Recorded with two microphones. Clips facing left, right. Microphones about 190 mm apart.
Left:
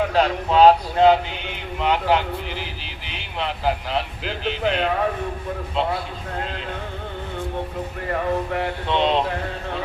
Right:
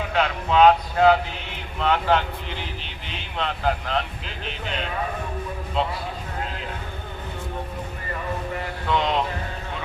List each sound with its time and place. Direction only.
0.1 s a man's voice: 35° left (ahead or behind)
1.8 s speech: 15° left (ahead or behind)
3.3 s speech: 10° left (ahead or behind)
4.3 s speech: 70° left (ahead or behind)
8.1 s speech: 65° left (ahead or behind)
8.9 s music: 25° left (ahead or behind)